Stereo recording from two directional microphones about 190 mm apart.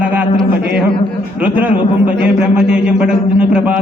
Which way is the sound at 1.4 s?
5° right (ahead or behind).